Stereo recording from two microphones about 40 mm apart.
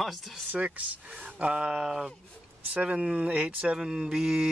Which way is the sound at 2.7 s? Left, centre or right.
Right.